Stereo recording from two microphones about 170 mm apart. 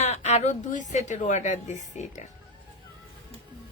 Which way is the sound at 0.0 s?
40° left (ahead or behind).